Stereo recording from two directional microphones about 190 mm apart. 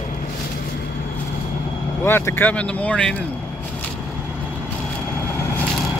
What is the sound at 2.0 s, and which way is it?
Speech, 10° left (ahead or behind).